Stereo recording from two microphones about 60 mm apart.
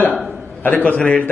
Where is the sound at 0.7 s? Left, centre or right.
Left.